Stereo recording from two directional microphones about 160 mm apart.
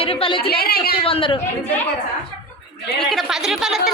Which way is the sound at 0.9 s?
35° left (ahead or behind).